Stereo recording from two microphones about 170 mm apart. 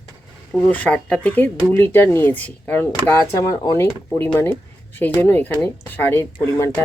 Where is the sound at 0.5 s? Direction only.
10° left (ahead or behind).